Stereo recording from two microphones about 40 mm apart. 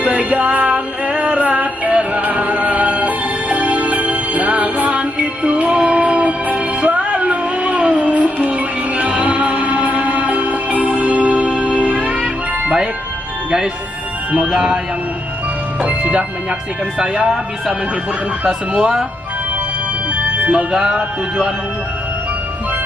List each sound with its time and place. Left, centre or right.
0.0 s music: right
14.4 s music: right
15.8 s music: right
18.4 s music: right
20.7 s music: right